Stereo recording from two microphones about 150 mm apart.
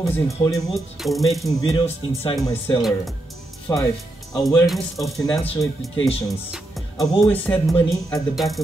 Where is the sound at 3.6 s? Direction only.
20° left (ahead or behind).